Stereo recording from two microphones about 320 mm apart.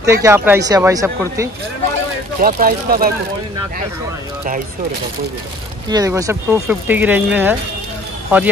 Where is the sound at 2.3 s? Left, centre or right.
Right.